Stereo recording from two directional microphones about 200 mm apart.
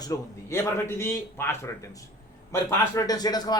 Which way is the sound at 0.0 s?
15° left (ahead or behind).